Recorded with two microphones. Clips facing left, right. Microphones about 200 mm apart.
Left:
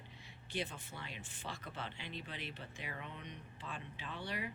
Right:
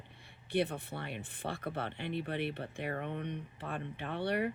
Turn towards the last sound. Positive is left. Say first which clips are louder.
# right 10 dB
turn(degrees=-60)  # may be behind; listen again after turning